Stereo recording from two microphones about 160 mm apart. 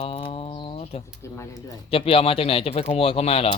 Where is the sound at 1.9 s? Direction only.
35° left (ahead or behind).